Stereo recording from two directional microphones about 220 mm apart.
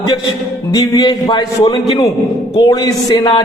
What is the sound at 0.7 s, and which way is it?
A man's voice, 20° left (ahead or behind).